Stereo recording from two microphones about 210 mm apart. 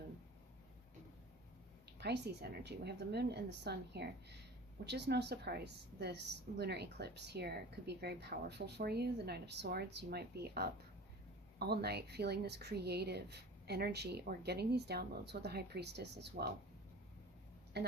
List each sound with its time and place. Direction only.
2.0 s a woman's voice: 50° right (ahead or behind)
17.7 s speech: 50° right (ahead or behind)